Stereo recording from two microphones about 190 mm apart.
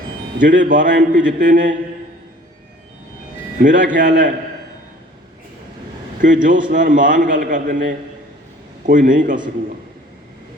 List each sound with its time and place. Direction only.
0.3 s a man's voice: 45° right (ahead or behind)
3.6 s a man's voice: 45° right (ahead or behind)
6.2 s a man's voice: 40° right (ahead or behind)